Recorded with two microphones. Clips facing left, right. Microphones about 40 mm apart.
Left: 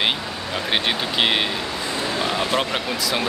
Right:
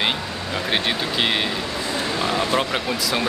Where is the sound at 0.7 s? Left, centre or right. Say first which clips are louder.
Left 1 dB; centre.